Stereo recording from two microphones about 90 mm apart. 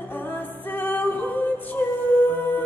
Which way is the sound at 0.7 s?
20° left (ahead or behind).